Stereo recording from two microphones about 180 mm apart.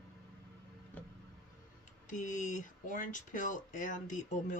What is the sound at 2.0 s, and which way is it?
Speech, 45° left (ahead or behind).